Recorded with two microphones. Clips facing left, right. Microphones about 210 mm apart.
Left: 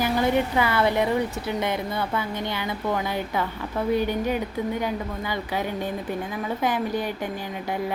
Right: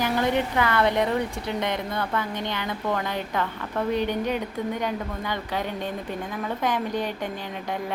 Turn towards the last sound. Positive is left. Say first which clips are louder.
# left 1 dB
turn(degrees=5)  # may be behind; listen again after turning